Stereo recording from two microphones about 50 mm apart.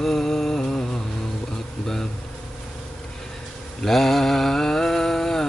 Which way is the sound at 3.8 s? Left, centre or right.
Centre.